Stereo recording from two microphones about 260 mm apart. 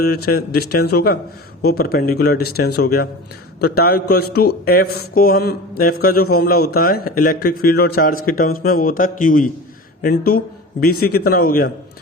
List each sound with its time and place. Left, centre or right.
0.0 s speech: left